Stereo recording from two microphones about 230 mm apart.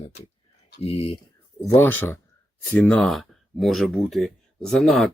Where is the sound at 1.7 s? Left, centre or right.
Centre.